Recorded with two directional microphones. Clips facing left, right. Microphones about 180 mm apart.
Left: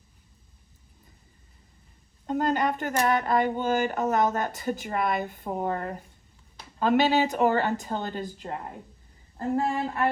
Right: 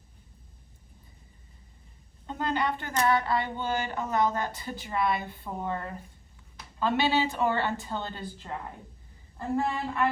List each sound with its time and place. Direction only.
2.2 s a woman's voice: 45° left (ahead or behind)